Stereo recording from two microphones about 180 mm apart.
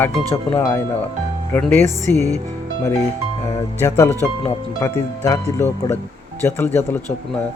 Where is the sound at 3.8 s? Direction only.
20° left (ahead or behind).